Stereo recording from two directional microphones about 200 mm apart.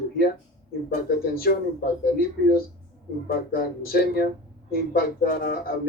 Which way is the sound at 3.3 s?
50° left (ahead or behind).